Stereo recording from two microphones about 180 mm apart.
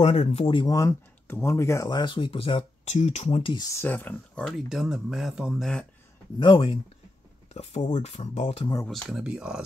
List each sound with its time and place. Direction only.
0.0 s speech: 35° left (ahead or behind)
3.8 s speech: 10° left (ahead or behind)
6.4 s speech: 25° left (ahead or behind)
7.9 s speech: 40° left (ahead or behind)
8.8 s speech: centre (ahead or behind)